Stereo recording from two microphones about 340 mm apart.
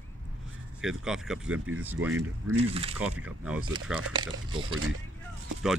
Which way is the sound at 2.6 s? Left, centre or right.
Centre.